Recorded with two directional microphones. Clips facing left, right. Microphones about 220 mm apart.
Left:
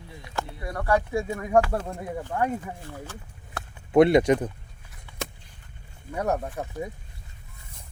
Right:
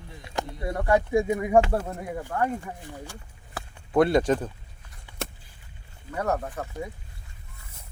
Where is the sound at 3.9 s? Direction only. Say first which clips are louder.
Left 3 dB; 20° left (ahead or behind).